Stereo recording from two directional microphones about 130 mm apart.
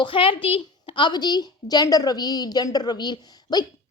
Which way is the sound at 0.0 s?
40° left (ahead or behind).